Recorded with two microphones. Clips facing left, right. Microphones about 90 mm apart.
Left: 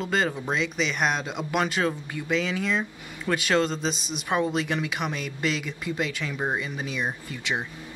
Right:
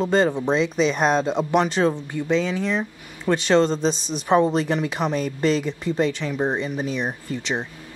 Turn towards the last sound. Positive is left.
turn(degrees=-40)  # may be behind; listen again after turning